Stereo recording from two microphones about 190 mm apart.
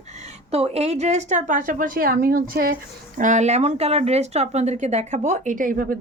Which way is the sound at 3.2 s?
40° right (ahead or behind).